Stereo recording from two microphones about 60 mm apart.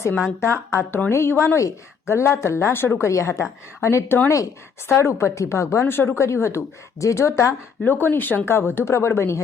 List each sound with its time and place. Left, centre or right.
0.3 s a woman's voice: left
3.1 s a woman's voice: left
3.8 s a woman's voice: left
5.8 s speech: left
6.1 s a woman's voice: left
7.9 s a woman's voice: left